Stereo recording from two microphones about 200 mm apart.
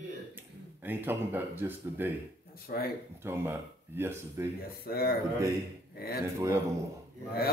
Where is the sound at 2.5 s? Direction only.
50° left (ahead or behind).